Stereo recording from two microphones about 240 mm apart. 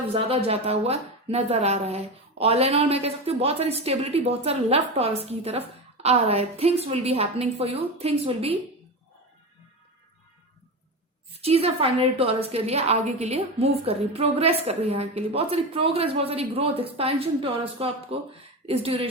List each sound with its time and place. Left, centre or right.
0.1 s speech: right
11.3 s speech: right